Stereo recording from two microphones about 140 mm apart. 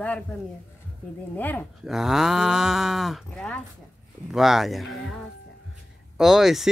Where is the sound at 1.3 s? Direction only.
10° left (ahead or behind).